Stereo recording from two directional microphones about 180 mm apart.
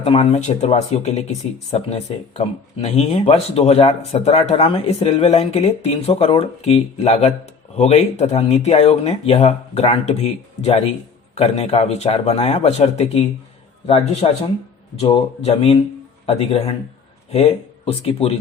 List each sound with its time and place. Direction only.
0.0 s speech: 35° left (ahead or behind)
17.8 s speech: 35° left (ahead or behind)